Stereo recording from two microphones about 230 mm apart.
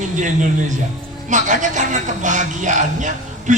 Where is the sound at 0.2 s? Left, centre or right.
Right.